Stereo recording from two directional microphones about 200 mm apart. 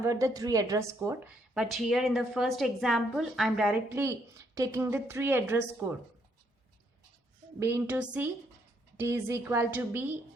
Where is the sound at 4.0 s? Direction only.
15° right (ahead or behind).